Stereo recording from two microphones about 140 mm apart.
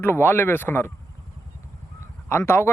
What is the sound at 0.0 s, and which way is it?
Speech, 15° left (ahead or behind).